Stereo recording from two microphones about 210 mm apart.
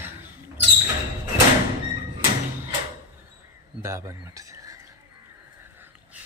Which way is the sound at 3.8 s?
15° right (ahead or behind).